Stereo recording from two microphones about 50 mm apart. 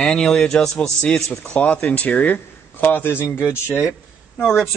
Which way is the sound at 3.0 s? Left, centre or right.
Left.